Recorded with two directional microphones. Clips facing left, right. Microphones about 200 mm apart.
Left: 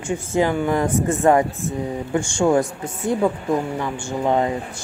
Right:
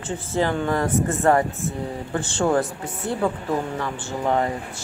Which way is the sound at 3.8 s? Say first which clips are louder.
Left 3 dB; 15° left (ahead or behind).